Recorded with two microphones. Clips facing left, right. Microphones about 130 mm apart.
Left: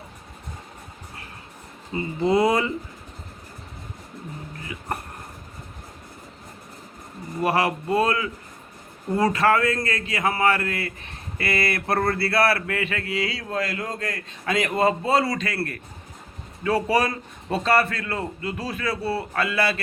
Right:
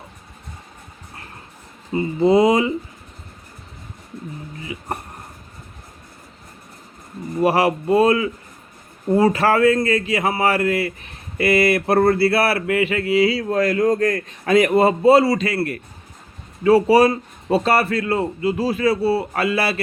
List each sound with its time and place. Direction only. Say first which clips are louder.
1.9 s a man's voice: right 6 dB; 25° right (ahead or behind)
7.4 s a man's voice: right 5 dB; 25° right (ahead or behind)
16.6 s a man's voice: right 9 dB; 30° right (ahead or behind)